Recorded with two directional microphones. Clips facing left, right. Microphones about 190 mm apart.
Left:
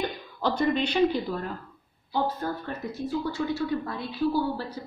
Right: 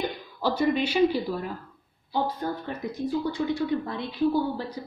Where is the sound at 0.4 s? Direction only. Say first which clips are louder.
Right 1 dB; 5° right (ahead or behind).